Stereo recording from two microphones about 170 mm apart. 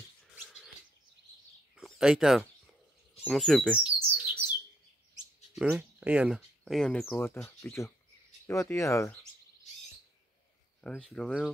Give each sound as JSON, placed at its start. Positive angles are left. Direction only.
{"t": 1.8, "sound": "speech", "side_deg": -5}
{"t": 3.3, "sound": "chirp", "side_deg": 0}
{"t": 5.6, "sound": "speech", "side_deg": -5}
{"t": 7.1, "sound": "speech", "side_deg": 15}
{"t": 10.8, "sound": "speech", "side_deg": 0}